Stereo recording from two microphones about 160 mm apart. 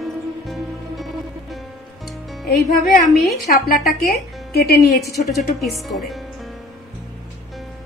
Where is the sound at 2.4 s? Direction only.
75° left (ahead or behind).